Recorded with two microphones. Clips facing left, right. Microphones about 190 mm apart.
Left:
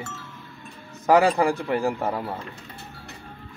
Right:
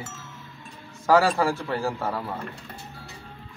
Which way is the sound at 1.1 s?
20° left (ahead or behind).